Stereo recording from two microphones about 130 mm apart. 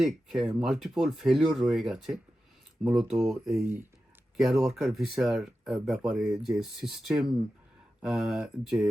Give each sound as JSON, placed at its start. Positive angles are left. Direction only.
{"t": 0.0, "sound": "speech", "side_deg": 0}